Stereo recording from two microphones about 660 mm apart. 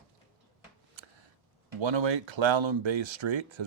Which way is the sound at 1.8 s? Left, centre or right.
Right.